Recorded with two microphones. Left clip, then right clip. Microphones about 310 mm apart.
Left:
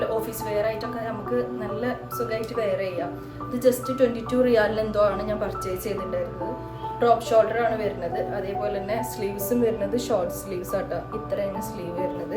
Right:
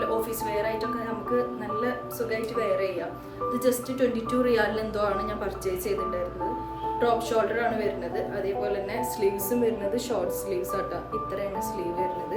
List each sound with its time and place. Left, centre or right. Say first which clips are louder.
1.4 s a woman's voice: even; centre
7.0 s a woman's voice: left 6 dB; centre